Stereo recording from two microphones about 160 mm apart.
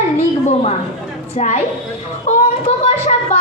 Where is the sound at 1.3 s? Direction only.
40° left (ahead or behind).